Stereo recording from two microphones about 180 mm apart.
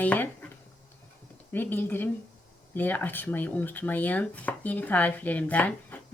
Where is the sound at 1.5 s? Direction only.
10° left (ahead or behind).